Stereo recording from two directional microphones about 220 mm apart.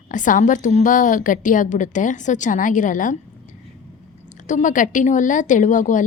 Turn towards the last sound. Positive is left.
turn(degrees=35)  # may be behind; listen again after turning